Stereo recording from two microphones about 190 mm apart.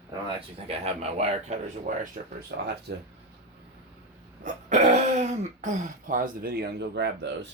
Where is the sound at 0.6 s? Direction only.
35° right (ahead or behind).